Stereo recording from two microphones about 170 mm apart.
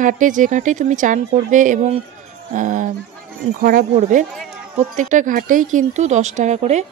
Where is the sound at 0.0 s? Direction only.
50° right (ahead or behind).